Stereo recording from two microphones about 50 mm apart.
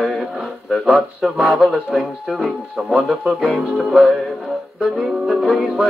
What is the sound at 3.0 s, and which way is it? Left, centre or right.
Music, centre.